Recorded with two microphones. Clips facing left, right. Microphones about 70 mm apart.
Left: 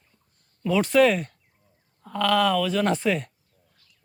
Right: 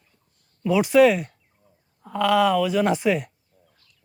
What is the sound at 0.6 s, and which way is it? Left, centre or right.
Speech, centre.